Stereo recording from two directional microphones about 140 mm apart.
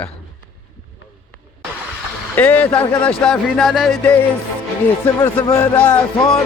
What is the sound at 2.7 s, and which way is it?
Speech, 35° left (ahead or behind).